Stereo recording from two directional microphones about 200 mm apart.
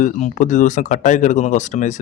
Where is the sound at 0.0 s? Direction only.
40° left (ahead or behind).